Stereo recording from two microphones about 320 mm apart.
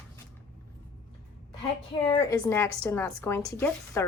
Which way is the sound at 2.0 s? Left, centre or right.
Centre.